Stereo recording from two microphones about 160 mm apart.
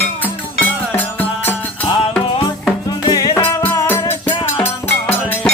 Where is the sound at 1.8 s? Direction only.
30° left (ahead or behind).